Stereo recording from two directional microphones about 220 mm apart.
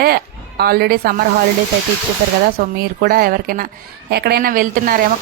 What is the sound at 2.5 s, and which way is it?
Speech, 45° right (ahead or behind).